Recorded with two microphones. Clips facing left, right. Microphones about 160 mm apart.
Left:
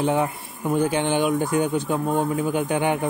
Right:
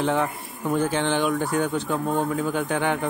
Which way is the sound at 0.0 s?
15° left (ahead or behind).